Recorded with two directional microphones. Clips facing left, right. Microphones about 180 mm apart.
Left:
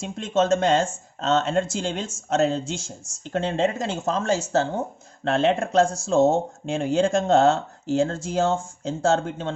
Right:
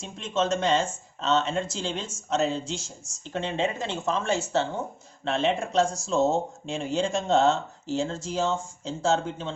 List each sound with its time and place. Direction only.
0.0 s speech: 50° left (ahead or behind)
5.2 s speech: 50° left (ahead or behind)